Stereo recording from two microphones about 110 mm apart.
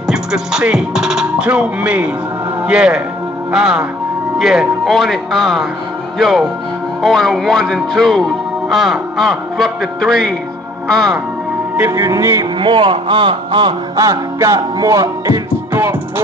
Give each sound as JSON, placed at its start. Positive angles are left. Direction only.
{"t": 0.1, "sound": "music", "side_deg": -5}
{"t": 2.6, "sound": "speech", "side_deg": -10}
{"t": 3.5, "sound": "music", "side_deg": -5}
{"t": 4.4, "sound": "speech", "side_deg": 0}
{"t": 11.9, "sound": "music", "side_deg": -30}
{"t": 12.5, "sound": "speech", "side_deg": -45}
{"t": 13.9, "sound": "music", "side_deg": -30}